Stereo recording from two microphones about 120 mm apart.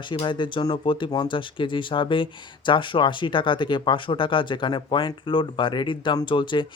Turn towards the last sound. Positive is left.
turn(degrees=40)  # may be behind; listen again after turning